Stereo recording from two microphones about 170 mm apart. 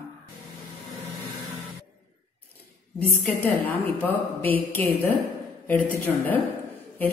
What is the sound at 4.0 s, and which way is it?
A woman's voice, 10° left (ahead or behind).